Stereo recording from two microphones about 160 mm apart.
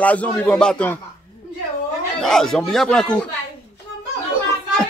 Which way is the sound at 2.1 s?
5° left (ahead or behind).